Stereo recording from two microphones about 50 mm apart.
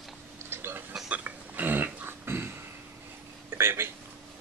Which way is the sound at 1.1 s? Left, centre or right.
Right.